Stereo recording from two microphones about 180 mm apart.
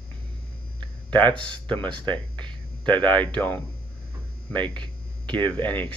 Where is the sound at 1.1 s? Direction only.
5° left (ahead or behind).